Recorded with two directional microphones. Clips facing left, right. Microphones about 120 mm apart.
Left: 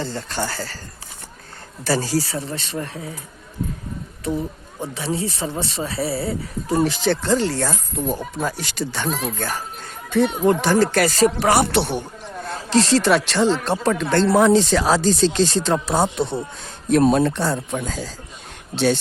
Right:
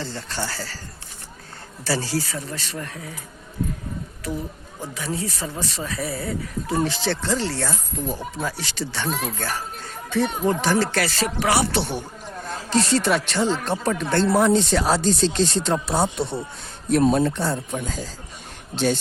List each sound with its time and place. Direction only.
0.0 s speech: 50° left (ahead or behind)
1.8 s speech: 50° left (ahead or behind)
2.3 s speech: 25° left (ahead or behind)
4.2 s speech: 25° left (ahead or behind)
6.7 s speech: 45° left (ahead or behind); by 11.9 s 65° left (ahead or behind)
12.7 s speech: 90° left